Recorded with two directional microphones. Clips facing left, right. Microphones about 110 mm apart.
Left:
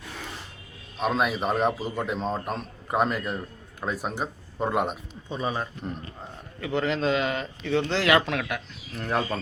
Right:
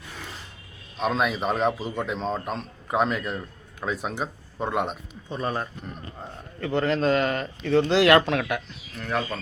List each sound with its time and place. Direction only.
0.9 s a man's voice: centre (ahead or behind)
9.0 s speech: 25° left (ahead or behind)